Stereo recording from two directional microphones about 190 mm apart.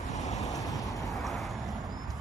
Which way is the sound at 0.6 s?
20° left (ahead or behind).